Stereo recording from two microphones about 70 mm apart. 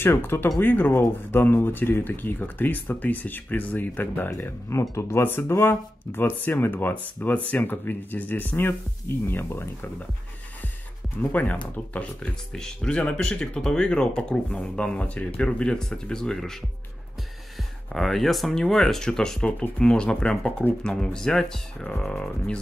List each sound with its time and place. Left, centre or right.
0.0 s speech: left
4.6 s speech: left
11.1 s speech: left
15.4 s speech: centre
17.9 s speech: centre